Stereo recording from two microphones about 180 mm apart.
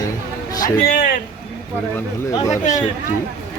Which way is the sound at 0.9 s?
50° left (ahead or behind).